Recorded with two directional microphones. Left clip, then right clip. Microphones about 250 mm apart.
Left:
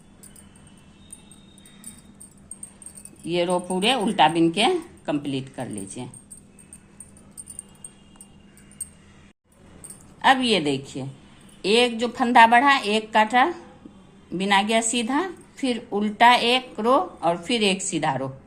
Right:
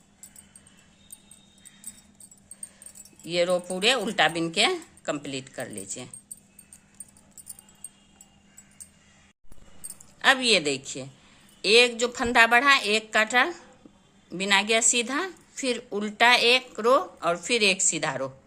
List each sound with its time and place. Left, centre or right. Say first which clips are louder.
3.2 s a woman's voice: left 1 dB; right
10.2 s a woman's voice: left 2 dB; right